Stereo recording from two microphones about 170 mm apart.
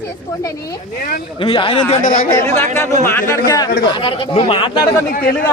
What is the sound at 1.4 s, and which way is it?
Speech, 30° left (ahead or behind).